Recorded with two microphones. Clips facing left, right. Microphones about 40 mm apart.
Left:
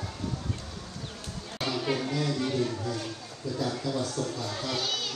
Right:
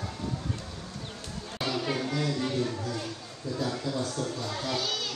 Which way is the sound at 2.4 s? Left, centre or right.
Right.